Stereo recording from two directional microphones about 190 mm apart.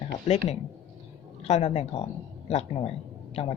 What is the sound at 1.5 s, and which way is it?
Speech, 35° left (ahead or behind).